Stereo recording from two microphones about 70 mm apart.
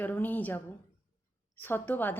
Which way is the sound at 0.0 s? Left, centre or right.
Left.